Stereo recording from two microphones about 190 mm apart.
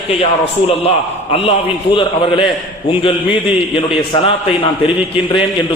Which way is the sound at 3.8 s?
30° left (ahead or behind).